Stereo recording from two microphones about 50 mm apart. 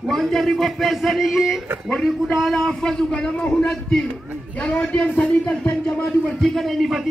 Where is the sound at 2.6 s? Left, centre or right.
Centre.